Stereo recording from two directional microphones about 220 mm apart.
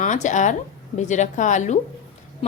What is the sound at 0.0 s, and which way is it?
Speech, 35° left (ahead or behind).